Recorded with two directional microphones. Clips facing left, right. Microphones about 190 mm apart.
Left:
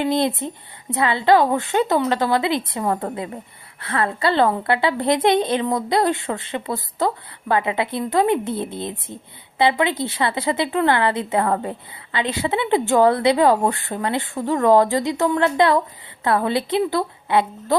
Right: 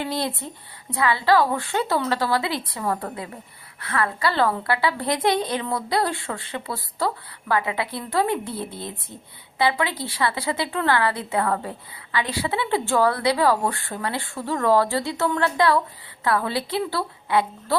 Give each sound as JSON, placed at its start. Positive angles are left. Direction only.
{"t": 0.0, "sound": "a woman's voice", "side_deg": 20}